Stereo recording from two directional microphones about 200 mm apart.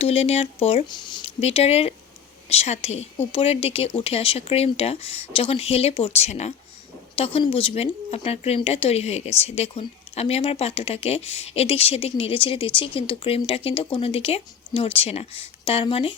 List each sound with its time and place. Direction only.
0.0 s speech: 30° left (ahead or behind)